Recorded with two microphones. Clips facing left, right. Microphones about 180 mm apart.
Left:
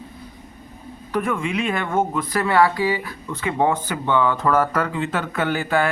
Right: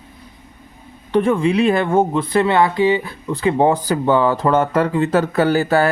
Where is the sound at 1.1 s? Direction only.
30° right (ahead or behind).